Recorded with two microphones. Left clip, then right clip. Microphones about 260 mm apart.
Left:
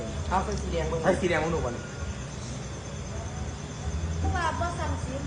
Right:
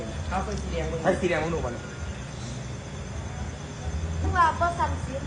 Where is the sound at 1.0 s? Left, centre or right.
Centre.